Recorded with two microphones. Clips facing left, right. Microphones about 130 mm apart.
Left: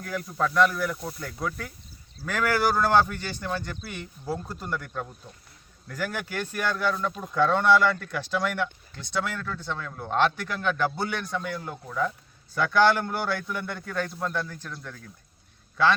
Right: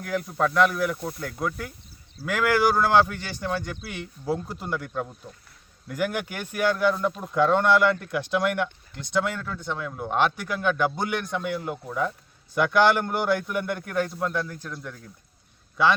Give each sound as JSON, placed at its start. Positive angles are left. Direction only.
{"t": 0.1, "sound": "a man's voice", "side_deg": -15}
{"t": 4.3, "sound": "a man's voice", "side_deg": -15}